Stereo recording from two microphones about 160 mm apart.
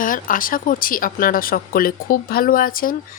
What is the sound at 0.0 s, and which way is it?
Speech, 60° left (ahead or behind).